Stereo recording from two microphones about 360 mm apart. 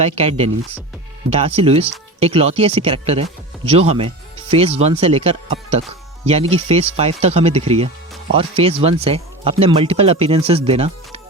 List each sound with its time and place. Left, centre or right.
0.0 s speech: centre